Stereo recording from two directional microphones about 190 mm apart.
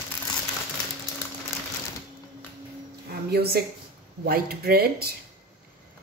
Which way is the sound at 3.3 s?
55° right (ahead or behind).